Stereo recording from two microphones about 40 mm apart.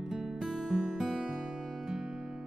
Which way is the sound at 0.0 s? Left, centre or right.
Centre.